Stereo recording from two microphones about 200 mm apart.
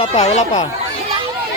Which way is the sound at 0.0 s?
35° left (ahead or behind).